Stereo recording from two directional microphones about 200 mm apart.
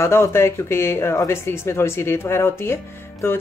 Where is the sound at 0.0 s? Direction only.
15° left (ahead or behind).